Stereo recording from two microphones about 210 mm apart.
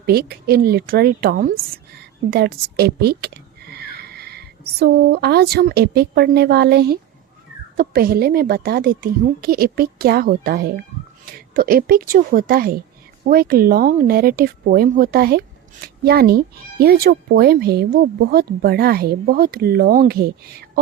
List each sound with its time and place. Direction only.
0.0 s a woman's voice: 45° right (ahead or behind)